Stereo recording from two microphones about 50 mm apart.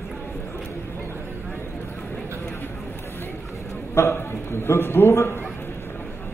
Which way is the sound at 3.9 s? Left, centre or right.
Left.